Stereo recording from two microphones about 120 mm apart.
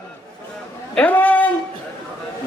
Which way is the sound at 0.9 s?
15° left (ahead or behind).